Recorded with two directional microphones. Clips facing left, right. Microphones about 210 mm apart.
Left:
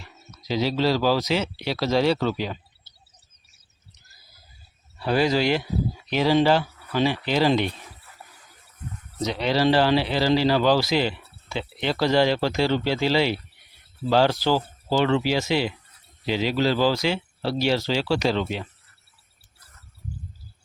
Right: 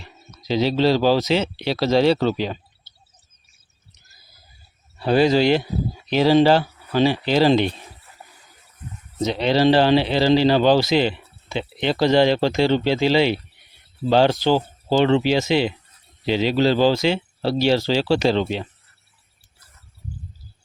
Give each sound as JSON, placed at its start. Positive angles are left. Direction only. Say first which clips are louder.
{"t": 0.0, "sound": "speech", "louder": "right 2 dB", "side_deg": -25}
{"t": 4.9, "sound": "speech", "louder": "right 5 dB", "side_deg": -25}
{"t": 9.1, "sound": "speech", "louder": "right 4 dB", "side_deg": -25}